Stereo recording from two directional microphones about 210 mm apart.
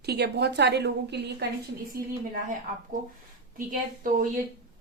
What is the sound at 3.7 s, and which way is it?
Speech, 40° right (ahead or behind).